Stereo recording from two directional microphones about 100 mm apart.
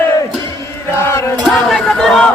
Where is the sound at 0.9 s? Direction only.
30° left (ahead or behind).